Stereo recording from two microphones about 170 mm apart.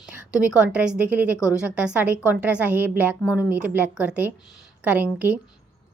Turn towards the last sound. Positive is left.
turn(degrees=-10)  # may be behind; listen again after turning